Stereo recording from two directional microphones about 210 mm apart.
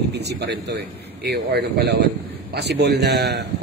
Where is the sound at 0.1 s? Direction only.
50° right (ahead or behind).